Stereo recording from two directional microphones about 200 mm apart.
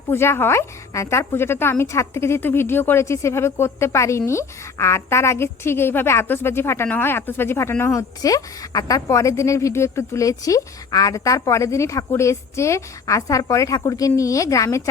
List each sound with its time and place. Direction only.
0.1 s a woman's voice: 10° left (ahead or behind)